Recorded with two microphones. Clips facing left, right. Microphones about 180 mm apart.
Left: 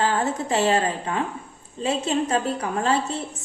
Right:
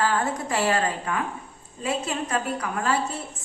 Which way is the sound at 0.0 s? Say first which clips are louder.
Left 2 dB; 25° left (ahead or behind).